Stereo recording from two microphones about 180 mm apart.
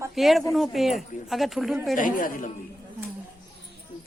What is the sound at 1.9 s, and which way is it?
Speech, 50° left (ahead or behind).